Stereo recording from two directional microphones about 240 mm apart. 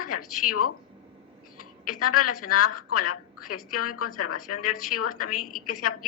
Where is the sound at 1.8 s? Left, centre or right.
Left.